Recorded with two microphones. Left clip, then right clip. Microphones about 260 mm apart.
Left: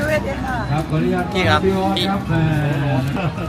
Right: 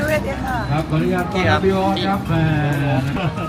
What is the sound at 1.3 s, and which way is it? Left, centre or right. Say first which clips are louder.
Speech: left 1 dB; centre.